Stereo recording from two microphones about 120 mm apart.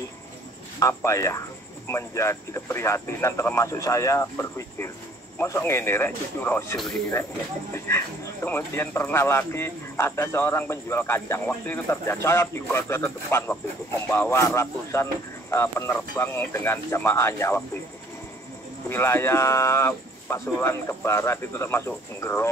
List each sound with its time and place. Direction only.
0.7 s speech: 25° left (ahead or behind)
18.9 s speech: 20° left (ahead or behind)